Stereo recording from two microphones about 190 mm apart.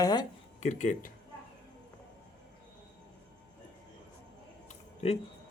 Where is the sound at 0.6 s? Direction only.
40° left (ahead or behind).